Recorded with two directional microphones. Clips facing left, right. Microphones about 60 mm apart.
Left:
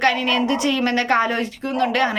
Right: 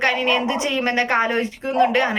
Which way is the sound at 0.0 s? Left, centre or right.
Right.